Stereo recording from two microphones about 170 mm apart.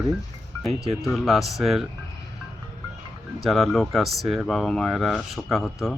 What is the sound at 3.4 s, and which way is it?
Speech, centre (ahead or behind).